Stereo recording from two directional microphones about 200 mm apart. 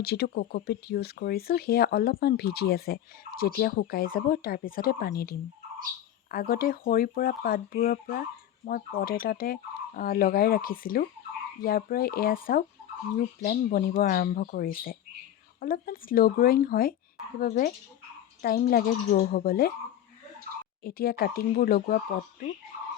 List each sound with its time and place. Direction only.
0.0 s speech: 50° left (ahead or behind)
20.8 s speech: 50° left (ahead or behind)